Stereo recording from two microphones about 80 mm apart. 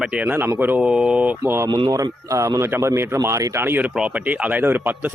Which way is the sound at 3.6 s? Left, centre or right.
Right.